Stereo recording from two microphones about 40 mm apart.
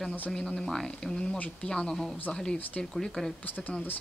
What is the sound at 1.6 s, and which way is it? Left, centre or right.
Speech, left.